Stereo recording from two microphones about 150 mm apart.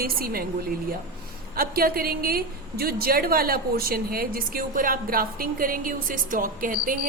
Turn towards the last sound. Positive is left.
turn(degrees=-70)  # may be behind; listen again after turning